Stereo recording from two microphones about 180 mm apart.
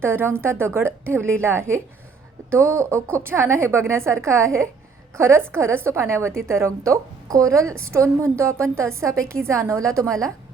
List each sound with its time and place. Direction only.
0.0 s a woman's voice: 10° right (ahead or behind)
10.1 s a woman's voice: 5° left (ahead or behind)